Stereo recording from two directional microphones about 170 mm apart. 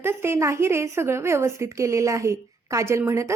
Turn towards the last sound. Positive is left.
turn(degrees=-15)  # may be behind; listen again after turning